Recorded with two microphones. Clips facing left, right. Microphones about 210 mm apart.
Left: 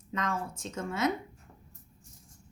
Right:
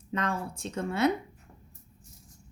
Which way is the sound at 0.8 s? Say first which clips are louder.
Right 4 dB; 65° right (ahead or behind).